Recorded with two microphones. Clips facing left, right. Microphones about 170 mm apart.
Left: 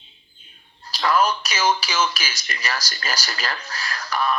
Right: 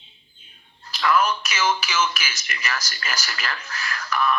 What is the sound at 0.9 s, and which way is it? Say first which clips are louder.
Speech: left 1 dB; 35° left (ahead or behind).